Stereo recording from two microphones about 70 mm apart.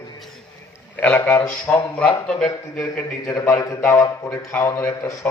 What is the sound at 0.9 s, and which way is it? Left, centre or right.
Speech, left.